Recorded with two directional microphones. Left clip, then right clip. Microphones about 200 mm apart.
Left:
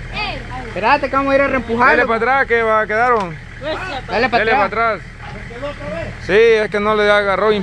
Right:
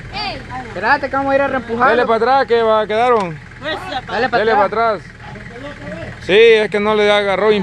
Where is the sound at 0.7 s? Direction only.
30° left (ahead or behind); by 2.0 s 50° left (ahead or behind).